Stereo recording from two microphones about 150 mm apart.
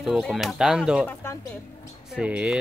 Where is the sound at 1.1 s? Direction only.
15° left (ahead or behind).